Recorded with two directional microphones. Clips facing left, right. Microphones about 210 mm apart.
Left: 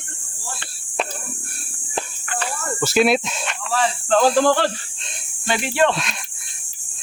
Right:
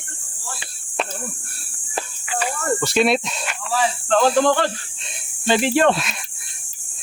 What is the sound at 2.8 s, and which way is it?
Speech, centre (ahead or behind).